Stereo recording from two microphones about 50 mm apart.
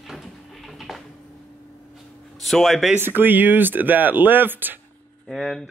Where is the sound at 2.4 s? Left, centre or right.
Centre.